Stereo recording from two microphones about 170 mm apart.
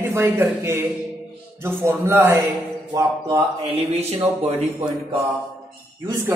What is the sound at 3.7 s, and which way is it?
Mantra, 35° right (ahead or behind).